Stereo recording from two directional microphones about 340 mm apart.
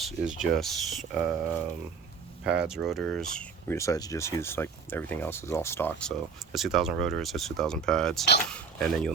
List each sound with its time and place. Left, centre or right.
0.0 s speech: centre
2.4 s speech: centre